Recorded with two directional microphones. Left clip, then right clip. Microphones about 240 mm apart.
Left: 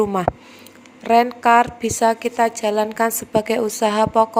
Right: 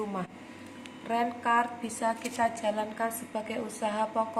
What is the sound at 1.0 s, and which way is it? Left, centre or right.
A woman's voice, left.